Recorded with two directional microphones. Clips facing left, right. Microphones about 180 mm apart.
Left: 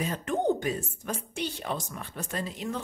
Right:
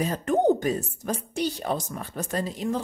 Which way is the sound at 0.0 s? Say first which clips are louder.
Right 6 dB; 40° right (ahead or behind).